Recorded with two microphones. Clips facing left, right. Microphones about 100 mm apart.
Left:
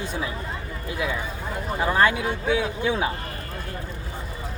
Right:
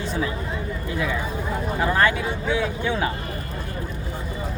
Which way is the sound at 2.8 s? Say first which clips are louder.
Even; 15° left (ahead or behind).